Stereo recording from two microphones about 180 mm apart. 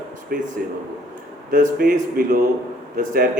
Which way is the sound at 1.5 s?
50° right (ahead or behind).